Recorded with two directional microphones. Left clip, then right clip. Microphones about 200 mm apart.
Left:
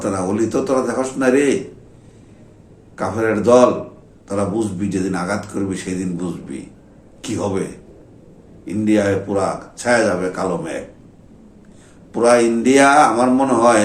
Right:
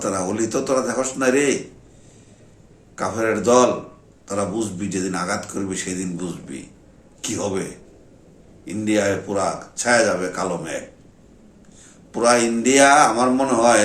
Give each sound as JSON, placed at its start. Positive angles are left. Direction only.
{"t": 0.0, "sound": "a man's voice", "side_deg": -10}
{"t": 2.9, "sound": "a man's voice", "side_deg": -10}
{"t": 12.1, "sound": "a man's voice", "side_deg": -10}